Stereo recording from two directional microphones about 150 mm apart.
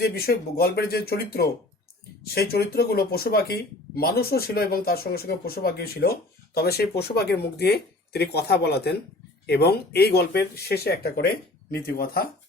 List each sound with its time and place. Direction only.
0.0 s speech: 90° left
2.5 s speech: 90° left